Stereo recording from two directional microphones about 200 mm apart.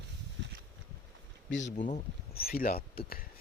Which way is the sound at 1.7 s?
40° left (ahead or behind).